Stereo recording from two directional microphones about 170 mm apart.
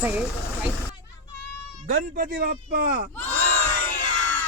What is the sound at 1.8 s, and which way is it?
Speech, 50° right (ahead or behind).